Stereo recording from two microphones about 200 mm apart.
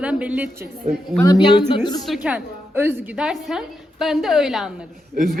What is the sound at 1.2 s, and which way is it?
Speech, 20° left (ahead or behind).